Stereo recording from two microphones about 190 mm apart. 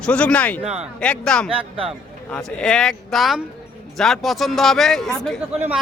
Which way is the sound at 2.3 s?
5° left (ahead or behind).